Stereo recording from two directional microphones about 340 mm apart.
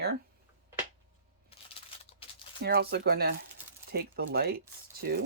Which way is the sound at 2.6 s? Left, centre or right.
Right.